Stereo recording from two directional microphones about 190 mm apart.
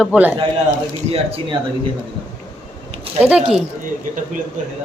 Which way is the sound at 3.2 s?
10° right (ahead or behind).